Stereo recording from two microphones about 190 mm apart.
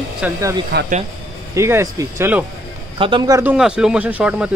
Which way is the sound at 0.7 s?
60° right (ahead or behind).